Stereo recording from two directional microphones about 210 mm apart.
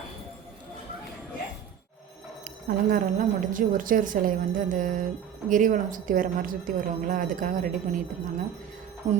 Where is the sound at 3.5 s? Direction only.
40° right (ahead or behind).